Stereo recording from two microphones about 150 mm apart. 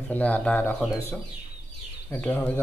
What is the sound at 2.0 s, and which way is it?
Speech, 10° left (ahead or behind).